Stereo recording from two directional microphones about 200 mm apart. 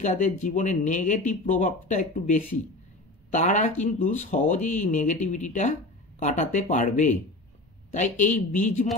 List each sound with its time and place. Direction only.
0.0 s speech: 40° left (ahead or behind)